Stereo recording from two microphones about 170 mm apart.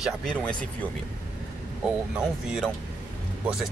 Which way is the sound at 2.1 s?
5° right (ahead or behind).